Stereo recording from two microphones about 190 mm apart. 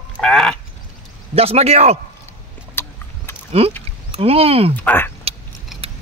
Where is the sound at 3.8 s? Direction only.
30° right (ahead or behind).